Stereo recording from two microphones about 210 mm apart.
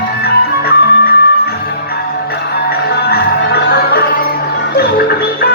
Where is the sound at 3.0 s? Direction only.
50° left (ahead or behind).